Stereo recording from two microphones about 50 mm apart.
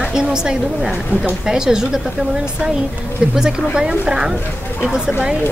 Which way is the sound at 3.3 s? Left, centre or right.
Centre.